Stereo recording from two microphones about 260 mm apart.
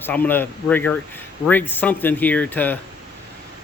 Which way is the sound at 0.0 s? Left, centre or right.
Centre.